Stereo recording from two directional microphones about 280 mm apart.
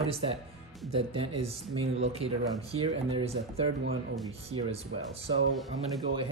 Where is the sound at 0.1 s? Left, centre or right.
Right.